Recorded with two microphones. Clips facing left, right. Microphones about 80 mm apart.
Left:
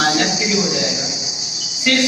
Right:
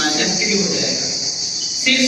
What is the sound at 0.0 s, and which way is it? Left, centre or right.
Cricket, left.